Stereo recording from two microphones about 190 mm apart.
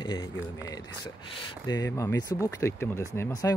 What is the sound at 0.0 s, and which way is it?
Speech, 20° left (ahead or behind).